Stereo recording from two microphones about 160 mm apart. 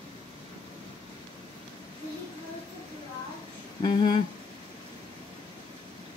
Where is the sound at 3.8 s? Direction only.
30° left (ahead or behind).